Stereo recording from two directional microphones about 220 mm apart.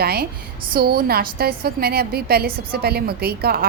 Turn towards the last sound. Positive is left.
turn(degrees=-45)  # may be behind; listen again after turning